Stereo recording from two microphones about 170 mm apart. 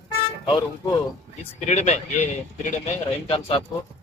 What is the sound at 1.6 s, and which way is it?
Speech, 40° left (ahead or behind).